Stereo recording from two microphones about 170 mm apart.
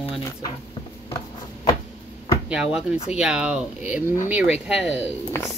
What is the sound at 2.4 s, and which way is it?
Speech, 5° right (ahead or behind).